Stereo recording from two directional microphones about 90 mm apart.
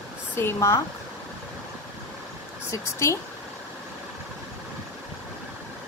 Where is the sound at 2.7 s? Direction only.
35° left (ahead or behind).